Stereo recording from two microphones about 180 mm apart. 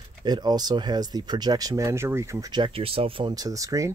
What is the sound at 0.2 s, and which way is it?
Speech, 25° right (ahead or behind).